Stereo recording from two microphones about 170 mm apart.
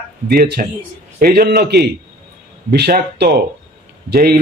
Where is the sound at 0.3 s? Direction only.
65° right (ahead or behind).